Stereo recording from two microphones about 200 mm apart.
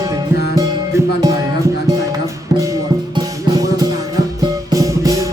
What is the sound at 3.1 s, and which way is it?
Music, 20° right (ahead or behind).